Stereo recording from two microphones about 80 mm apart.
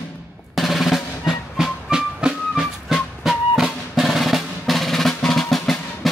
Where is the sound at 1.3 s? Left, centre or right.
Centre.